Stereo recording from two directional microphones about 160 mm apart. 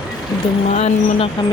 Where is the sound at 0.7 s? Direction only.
45° left (ahead or behind).